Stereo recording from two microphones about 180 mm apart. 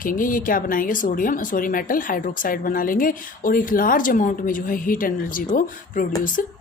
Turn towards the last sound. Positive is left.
turn(degrees=50)  # may be behind; listen again after turning